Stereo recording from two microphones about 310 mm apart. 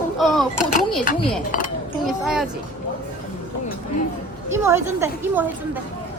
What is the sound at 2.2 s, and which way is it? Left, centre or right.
Speech, centre.